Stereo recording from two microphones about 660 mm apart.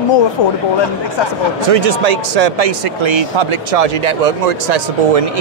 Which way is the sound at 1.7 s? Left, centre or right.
Right.